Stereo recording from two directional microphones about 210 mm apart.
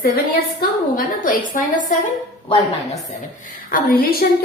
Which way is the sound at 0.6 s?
40° left (ahead or behind).